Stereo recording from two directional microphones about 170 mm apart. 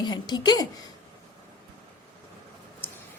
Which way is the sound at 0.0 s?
25° left (ahead or behind).